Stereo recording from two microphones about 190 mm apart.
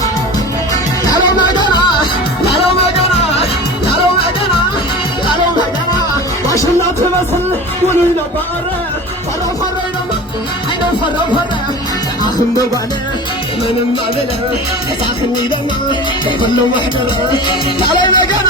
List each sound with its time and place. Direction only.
1.1 s music: 20° left (ahead or behind)
17.7 s music: 25° left (ahead or behind)